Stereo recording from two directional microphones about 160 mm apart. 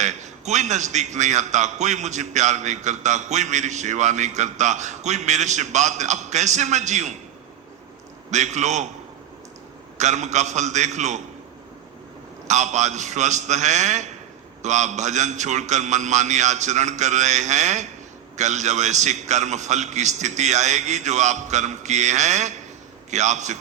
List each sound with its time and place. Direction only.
0.0 s a man's voice: 45° right (ahead or behind)
8.3 s a man's voice: 45° right (ahead or behind)
10.0 s a man's voice: 45° right (ahead or behind)
12.5 s a man's voice: 45° right (ahead or behind)